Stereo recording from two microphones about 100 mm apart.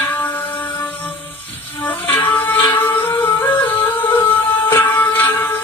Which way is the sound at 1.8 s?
20° left (ahead or behind).